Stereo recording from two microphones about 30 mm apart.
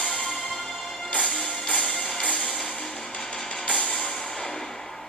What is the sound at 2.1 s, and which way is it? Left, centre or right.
Music, left.